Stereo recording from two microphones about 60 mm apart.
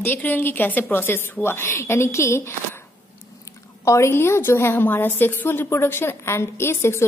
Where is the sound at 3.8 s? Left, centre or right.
Left.